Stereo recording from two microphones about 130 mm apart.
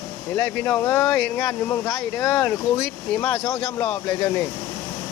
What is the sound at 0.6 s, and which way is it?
Speech, 15° left (ahead or behind).